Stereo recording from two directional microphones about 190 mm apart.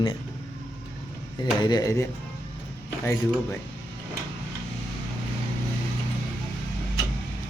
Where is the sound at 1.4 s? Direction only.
20° left (ahead or behind).